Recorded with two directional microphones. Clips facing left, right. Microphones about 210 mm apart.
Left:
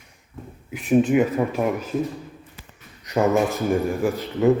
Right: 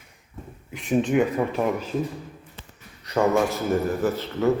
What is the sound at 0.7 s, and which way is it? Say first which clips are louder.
Speech: left 4 dB; 5° left (ahead or behind).